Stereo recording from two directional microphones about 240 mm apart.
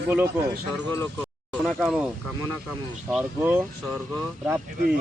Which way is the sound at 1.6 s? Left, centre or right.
Centre.